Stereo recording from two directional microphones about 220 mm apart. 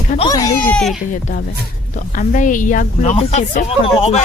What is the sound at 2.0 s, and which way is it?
Speech, 35° left (ahead or behind).